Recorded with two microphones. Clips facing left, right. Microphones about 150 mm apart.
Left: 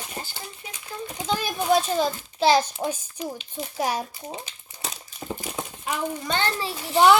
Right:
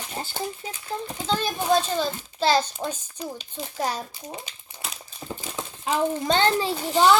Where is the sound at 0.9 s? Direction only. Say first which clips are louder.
Right 3 dB; 25° right (ahead or behind).